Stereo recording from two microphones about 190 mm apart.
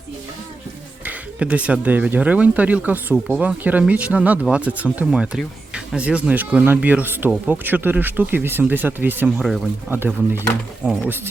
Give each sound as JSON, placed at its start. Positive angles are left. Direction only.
{"t": 1.0, "sound": "speech", "side_deg": -5}